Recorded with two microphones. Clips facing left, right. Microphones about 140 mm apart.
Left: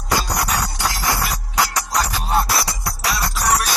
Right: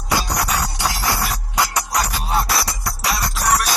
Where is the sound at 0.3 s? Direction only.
Centre (ahead or behind).